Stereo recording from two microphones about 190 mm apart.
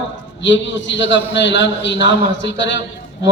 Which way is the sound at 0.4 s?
75° left (ahead or behind).